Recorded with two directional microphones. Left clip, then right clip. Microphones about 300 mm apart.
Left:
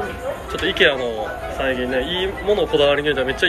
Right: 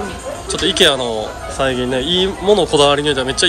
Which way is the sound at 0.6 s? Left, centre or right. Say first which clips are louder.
Right 4 dB; centre.